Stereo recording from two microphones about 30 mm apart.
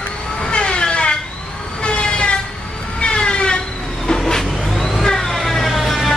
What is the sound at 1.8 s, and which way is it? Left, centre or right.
Train, left.